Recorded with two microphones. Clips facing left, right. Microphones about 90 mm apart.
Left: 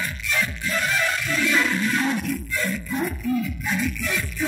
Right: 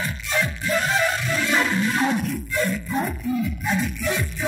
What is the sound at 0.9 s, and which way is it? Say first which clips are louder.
Music: right 2 dB; 25° right (ahead or behind).